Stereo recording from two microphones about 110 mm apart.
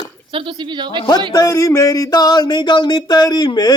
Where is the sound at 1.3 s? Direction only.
35° left (ahead or behind).